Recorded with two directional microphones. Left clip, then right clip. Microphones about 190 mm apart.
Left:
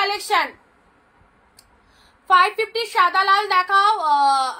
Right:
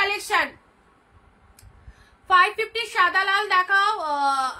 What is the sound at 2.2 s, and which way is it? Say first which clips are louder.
A woman's voice: left 3 dB; 5° right (ahead or behind).